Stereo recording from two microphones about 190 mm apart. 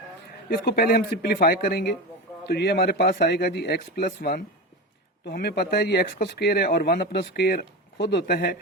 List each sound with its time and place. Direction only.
0.6 s speech: 55° left (ahead or behind)